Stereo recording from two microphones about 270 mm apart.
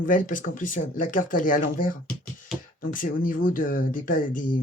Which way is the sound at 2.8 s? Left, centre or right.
Left.